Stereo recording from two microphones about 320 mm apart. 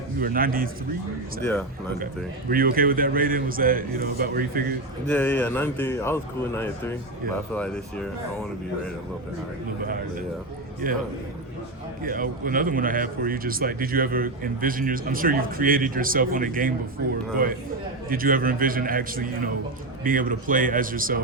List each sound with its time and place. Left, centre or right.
0.2 s speech: right
2.5 s speech: right
5.0 s speech: centre
9.8 s speech: right
12.0 s speech: right
18.1 s speech: right